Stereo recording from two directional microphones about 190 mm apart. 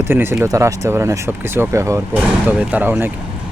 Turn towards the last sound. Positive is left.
turn(degrees=-10)  # may be behind; listen again after turning